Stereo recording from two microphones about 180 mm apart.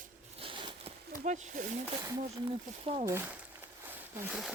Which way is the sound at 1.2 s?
45° right (ahead or behind).